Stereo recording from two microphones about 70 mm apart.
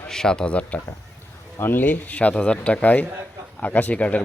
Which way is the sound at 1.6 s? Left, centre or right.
Left.